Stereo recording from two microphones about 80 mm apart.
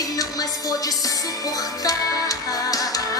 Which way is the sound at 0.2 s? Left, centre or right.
Left.